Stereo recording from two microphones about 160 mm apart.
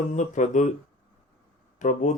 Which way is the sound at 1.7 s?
50° left (ahead or behind).